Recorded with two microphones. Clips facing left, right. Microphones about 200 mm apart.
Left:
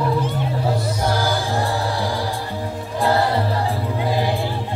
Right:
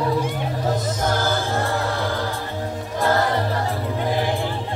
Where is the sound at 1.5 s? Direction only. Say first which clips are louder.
Left 1 dB; 55° right (ahead or behind).